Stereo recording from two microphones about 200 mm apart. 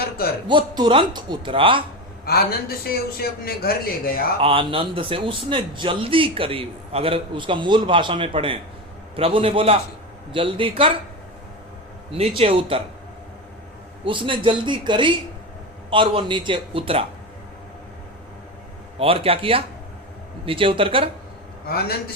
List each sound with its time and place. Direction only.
0.4 s a man's voice: 20° right (ahead or behind)
2.2 s a man's voice: 50° left (ahead or behind)
4.4 s a man's voice: 25° right (ahead or behind)
12.4 s a man's voice: 25° right (ahead or behind)
14.0 s a man's voice: 25° right (ahead or behind)
18.9 s a man's voice: 30° right (ahead or behind)
21.7 s a man's voice: 50° left (ahead or behind)